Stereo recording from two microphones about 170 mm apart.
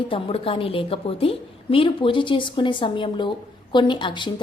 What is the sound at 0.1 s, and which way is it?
A woman's voice, 30° left (ahead or behind).